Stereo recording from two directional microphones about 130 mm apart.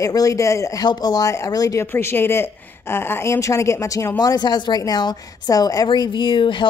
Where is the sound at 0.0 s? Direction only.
25° left (ahead or behind).